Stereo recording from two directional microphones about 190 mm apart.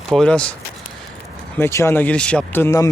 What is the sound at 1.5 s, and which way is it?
Speech, 15° left (ahead or behind).